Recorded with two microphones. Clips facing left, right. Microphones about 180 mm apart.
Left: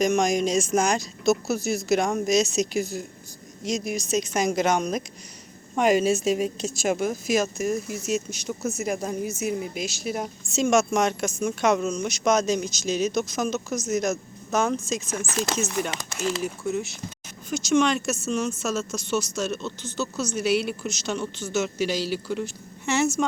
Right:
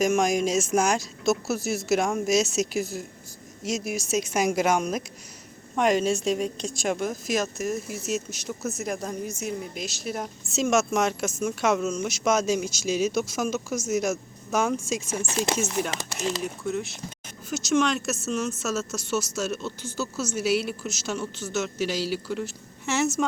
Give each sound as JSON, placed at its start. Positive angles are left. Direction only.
{"t": 0.0, "sound": "a woman's voice", "side_deg": -5}
{"t": 5.7, "sound": "a woman's voice", "side_deg": 5}
{"t": 15.2, "sound": "chopping", "side_deg": -25}
{"t": 15.5, "sound": "speech", "side_deg": -10}
{"t": 16.4, "sound": "a woman's voice", "side_deg": 5}